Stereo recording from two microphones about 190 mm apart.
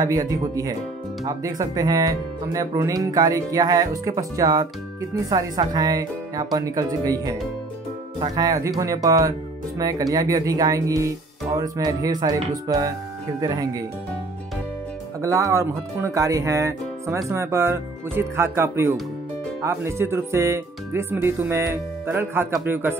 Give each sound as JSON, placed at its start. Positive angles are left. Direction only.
{"t": 0.0, "sound": "speech", "side_deg": -20}
{"t": 15.2, "sound": "speech", "side_deg": -15}